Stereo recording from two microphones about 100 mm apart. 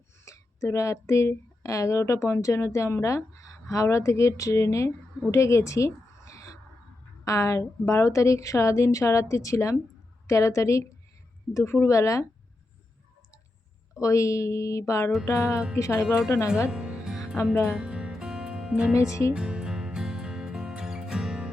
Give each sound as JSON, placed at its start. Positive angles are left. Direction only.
{"t": 0.3, "sound": "speech", "side_deg": 30}
{"t": 5.3, "sound": "a sound", "side_deg": 30}
{"t": 7.3, "sound": "speech", "side_deg": 35}
{"t": 14.0, "sound": "speech", "side_deg": 30}
{"t": 15.2, "sound": "music", "side_deg": 25}
{"t": 16.6, "sound": "music", "side_deg": -10}
{"t": 17.5, "sound": "music", "side_deg": 25}
{"t": 17.7, "sound": "music", "side_deg": -5}